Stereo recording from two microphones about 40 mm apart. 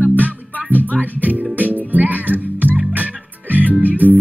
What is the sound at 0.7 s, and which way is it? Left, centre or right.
Music, left.